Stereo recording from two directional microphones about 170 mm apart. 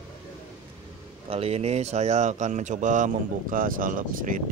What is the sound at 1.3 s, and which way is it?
Speech, 35° right (ahead or behind).